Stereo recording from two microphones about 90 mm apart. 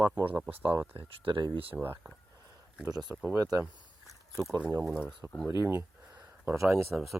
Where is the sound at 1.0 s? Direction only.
75° right (ahead or behind).